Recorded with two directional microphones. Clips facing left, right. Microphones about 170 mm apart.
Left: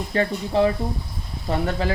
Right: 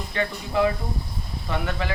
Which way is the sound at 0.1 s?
30° left (ahead or behind).